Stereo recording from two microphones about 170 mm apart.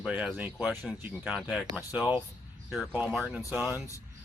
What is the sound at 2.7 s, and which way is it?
Speech, 5° right (ahead or behind).